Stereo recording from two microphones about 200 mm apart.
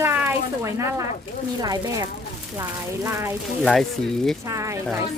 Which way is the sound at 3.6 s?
Centre (ahead or behind).